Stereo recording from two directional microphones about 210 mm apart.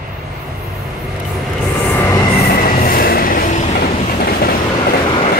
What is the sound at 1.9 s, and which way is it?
Music, 15° left (ahead or behind).